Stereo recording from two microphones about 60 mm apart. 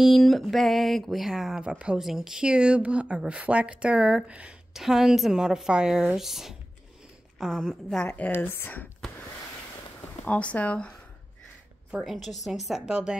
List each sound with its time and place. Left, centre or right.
0.0 s a woman's voice: centre
4.7 s a woman's voice: centre
8.4 s speech: left
10.2 s speech: left
12.0 s speech: centre
12.8 s a woman's voice: centre